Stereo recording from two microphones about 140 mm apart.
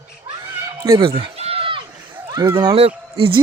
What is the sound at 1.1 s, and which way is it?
Speech, 45° right (ahead or behind).